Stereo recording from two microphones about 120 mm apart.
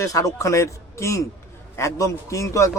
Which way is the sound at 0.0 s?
25° left (ahead or behind).